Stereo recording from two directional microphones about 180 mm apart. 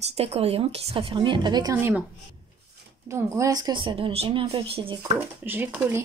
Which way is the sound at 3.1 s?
15° right (ahead or behind).